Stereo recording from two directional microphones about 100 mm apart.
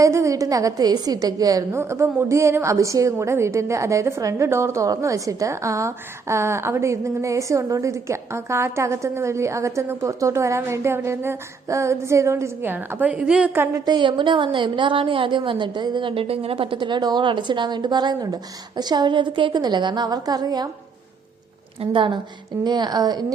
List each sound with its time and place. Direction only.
0.0 s a woman's voice: 30° right (ahead or behind); by 13.5 s 10° right (ahead or behind)
13.5 s a woman's voice: 20° right (ahead or behind)
13.8 s a woman's voice: 50° right (ahead or behind)
21.8 s a woman's voice: 55° right (ahead or behind)